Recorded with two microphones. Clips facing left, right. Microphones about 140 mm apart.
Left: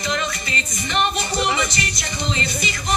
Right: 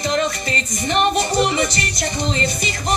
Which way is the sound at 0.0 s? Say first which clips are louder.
Right 5 dB; 40° right (ahead or behind).